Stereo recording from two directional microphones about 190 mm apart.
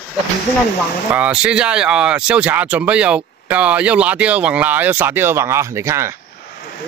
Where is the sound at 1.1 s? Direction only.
5° right (ahead or behind).